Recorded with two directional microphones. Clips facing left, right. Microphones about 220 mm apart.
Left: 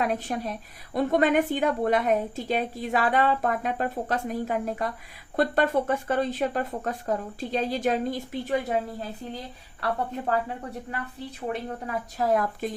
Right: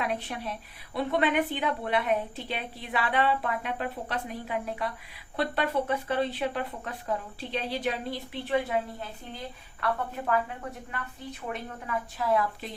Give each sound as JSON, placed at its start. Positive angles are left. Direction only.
{"t": 0.0, "sound": "a woman's voice", "side_deg": 45}
{"t": 11.4, "sound": "a woman's voice", "side_deg": 40}